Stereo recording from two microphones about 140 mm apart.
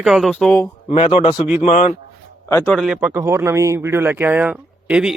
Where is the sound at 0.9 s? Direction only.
45° left (ahead or behind).